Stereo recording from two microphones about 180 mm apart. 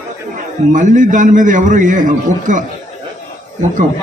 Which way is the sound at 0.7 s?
45° right (ahead or behind).